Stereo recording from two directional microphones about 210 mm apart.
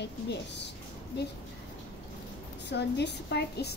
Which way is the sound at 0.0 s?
55° left (ahead or behind).